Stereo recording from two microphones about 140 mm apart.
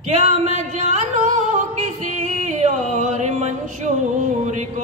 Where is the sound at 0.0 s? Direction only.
55° right (ahead or behind).